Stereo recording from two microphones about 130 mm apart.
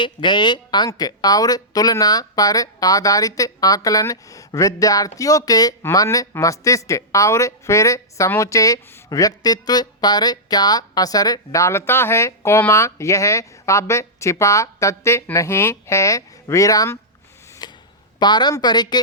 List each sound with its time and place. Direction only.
0.0 s a woman's voice: 35° left (ahead or behind)
17.6 s a sound: 35° left (ahead or behind)
18.2 s a woman's voice: 35° left (ahead or behind)